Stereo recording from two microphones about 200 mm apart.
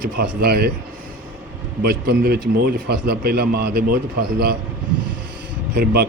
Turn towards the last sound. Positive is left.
turn(degrees=-50)  # may be behind; listen again after turning